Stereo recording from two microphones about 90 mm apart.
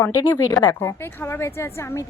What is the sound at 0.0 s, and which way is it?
A woman's voice, 35° left (ahead or behind).